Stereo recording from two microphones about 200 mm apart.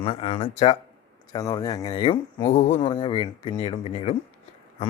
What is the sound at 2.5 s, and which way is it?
Speech, 35° left (ahead or behind).